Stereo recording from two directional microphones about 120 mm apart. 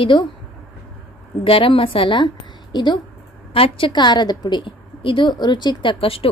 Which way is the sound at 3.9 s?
40° left (ahead or behind).